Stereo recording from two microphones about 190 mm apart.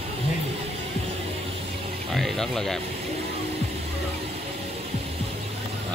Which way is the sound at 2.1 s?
Centre (ahead or behind).